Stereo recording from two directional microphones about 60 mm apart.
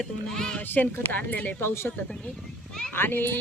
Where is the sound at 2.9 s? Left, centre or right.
Left.